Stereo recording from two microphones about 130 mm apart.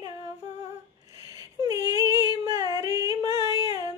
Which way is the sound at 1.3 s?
25° right (ahead or behind).